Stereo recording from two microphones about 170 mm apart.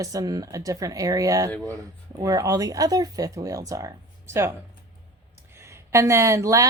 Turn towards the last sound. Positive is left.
turn(degrees=-20)  # may be behind; listen again after turning